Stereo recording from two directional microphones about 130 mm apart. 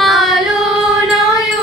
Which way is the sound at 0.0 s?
Centre (ahead or behind).